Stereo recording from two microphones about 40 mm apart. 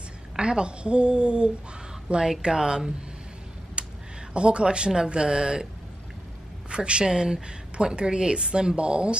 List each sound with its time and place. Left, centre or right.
0.4 s a woman's voice: right
2.4 s speech: centre
3.8 s a sound: right
4.3 s a woman's voice: right
6.7 s a woman's voice: right